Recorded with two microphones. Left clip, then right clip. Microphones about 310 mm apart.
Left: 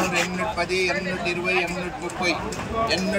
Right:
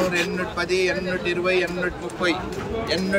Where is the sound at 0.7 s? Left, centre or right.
Right.